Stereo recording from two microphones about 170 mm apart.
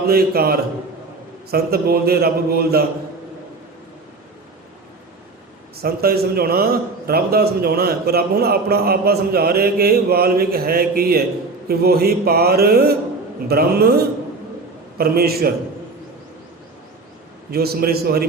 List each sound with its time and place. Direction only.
0.1 s a man's voice: 60° right (ahead or behind)
5.7 s a man's voice: 65° right (ahead or behind)
17.5 s a man's voice: 65° right (ahead or behind)